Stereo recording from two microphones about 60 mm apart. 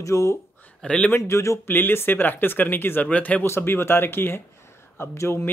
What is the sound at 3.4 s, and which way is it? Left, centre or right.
Speech, left.